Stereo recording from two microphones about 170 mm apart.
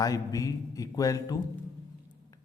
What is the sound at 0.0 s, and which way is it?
A man's voice, 20° left (ahead or behind).